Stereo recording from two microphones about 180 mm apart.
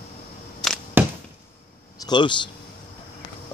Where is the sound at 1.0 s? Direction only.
10° right (ahead or behind).